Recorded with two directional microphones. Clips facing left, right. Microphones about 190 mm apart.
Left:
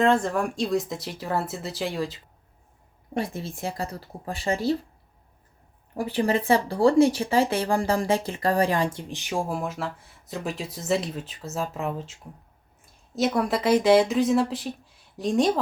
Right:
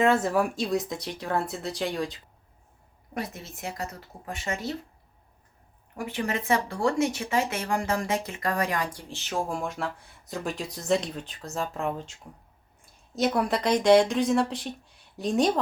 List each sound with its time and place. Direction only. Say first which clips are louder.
0.0 s speech: left 1 dB; 5° right (ahead or behind)
3.2 s speech: left 6 dB; 30° left (ahead or behind)
5.9 s speech: left 6 dB; 35° left (ahead or behind); by 15.5 s centre (ahead or behind)